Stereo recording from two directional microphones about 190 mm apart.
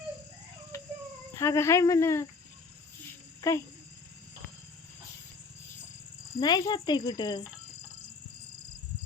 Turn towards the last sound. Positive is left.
turn(degrees=20)  # may be behind; listen again after turning